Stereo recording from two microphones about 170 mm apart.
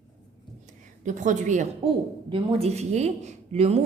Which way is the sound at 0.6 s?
45° right (ahead or behind).